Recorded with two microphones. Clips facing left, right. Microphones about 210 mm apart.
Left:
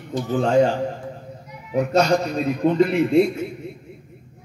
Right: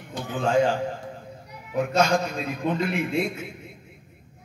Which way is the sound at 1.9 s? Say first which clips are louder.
Left 4 dB; 40° left (ahead or behind).